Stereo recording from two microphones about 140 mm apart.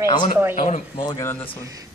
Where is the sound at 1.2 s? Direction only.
15° left (ahead or behind).